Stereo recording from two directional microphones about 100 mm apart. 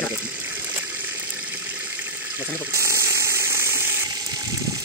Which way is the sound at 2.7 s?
30° right (ahead or behind).